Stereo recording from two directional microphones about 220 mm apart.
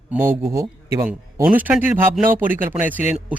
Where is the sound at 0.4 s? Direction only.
15° right (ahead or behind).